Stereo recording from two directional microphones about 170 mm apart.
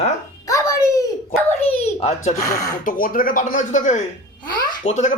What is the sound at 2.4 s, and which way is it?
Speech, 20° left (ahead or behind).